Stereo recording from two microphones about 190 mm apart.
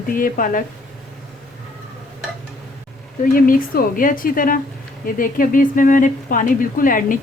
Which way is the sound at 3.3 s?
45° left (ahead or behind).